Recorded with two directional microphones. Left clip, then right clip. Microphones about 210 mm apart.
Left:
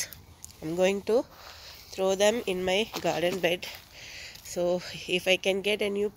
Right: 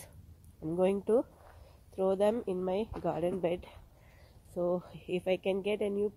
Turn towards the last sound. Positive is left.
turn(degrees=0)  # may be behind; listen again after turning